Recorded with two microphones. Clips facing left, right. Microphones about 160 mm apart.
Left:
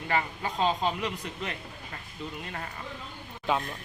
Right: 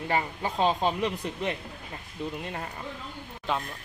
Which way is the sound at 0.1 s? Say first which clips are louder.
Even; 30° right (ahead or behind).